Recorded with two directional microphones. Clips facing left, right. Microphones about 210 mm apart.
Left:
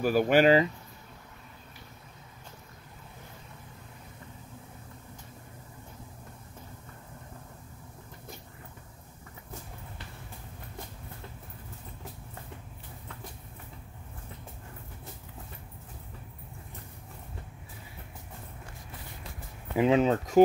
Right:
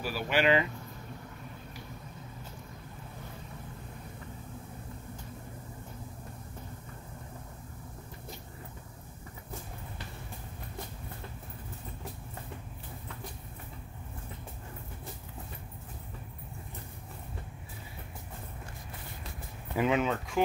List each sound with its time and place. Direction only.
0.0 s speech: 50° left (ahead or behind)
19.8 s speech: 30° left (ahead or behind)